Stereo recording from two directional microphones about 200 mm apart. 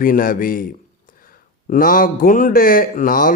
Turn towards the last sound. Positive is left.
turn(degrees=45)  # may be behind; listen again after turning